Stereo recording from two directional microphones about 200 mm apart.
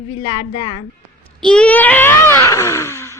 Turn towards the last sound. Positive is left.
turn(degrees=15)  # may be behind; listen again after turning